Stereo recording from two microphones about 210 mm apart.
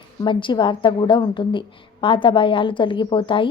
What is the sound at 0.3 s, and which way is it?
A woman's voice, 25° left (ahead or behind).